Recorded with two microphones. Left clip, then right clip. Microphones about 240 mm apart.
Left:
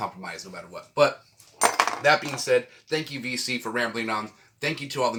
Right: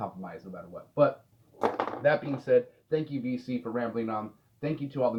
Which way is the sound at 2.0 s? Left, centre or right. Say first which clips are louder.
Left 1 dB; left.